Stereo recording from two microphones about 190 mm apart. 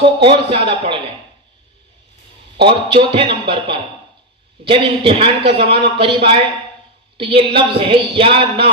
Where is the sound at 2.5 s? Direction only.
30° right (ahead or behind).